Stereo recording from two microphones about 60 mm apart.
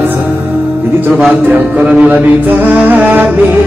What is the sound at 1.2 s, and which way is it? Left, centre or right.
Speech, right.